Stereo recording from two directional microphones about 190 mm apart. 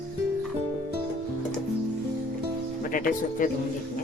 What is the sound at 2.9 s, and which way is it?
Speech, 45° left (ahead or behind).